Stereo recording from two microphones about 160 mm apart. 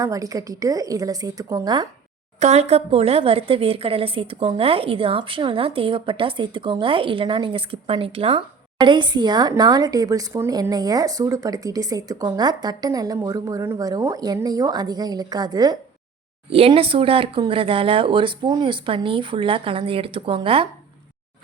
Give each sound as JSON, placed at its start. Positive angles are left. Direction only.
{"t": 0.0, "sound": "speech", "side_deg": -20}
{"t": 2.4, "sound": "a woman's voice", "side_deg": -40}
{"t": 16.5, "sound": "a woman's voice", "side_deg": -35}